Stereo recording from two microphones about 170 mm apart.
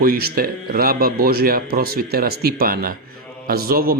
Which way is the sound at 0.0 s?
65° right (ahead or behind).